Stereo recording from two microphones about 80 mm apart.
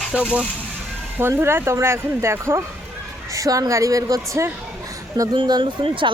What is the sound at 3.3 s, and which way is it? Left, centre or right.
A woman's voice, right.